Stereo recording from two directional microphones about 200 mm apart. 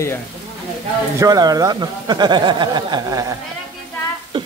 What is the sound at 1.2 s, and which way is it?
Speech, 20° right (ahead or behind).